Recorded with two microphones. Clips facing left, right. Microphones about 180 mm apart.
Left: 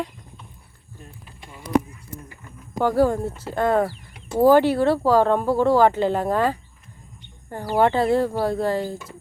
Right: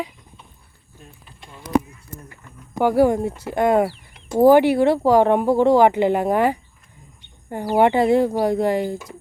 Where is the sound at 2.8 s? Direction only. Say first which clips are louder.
Right 3 dB; 15° right (ahead or behind).